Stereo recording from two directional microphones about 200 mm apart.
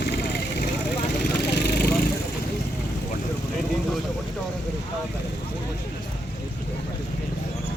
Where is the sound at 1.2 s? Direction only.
55° left (ahead or behind).